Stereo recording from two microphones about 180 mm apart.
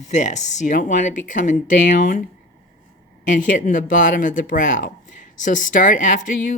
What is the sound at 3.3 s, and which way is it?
Speech, 45° left (ahead or behind).